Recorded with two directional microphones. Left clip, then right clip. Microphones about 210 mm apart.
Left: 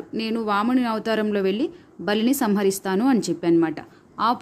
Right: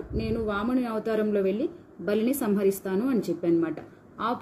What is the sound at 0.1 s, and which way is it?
Speech, 45° left (ahead or behind).